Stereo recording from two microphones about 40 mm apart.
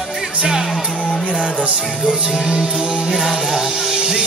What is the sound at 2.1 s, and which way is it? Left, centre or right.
Music, centre.